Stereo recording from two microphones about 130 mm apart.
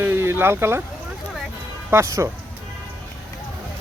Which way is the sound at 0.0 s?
20° right (ahead or behind).